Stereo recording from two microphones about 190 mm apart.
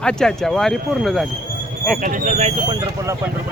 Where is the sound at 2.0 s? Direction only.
45° right (ahead or behind).